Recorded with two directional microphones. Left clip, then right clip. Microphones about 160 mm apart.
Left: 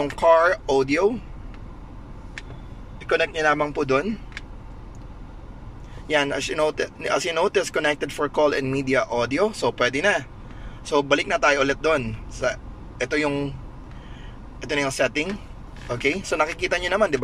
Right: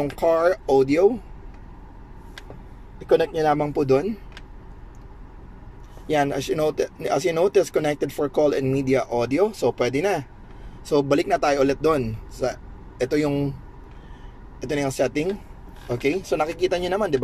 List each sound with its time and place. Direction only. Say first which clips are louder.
0.0 s speech: left 3 dB; 20° right (ahead or behind)
3.1 s speech: right 1 dB; 25° right (ahead or behind)
6.0 s speech: even; 25° right (ahead or behind)
14.6 s speech: left 1 dB; 20° right (ahead or behind)